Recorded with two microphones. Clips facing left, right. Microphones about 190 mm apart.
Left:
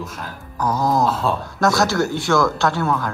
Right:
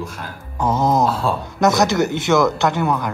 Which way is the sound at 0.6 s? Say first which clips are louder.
Right 2 dB; 25° right (ahead or behind).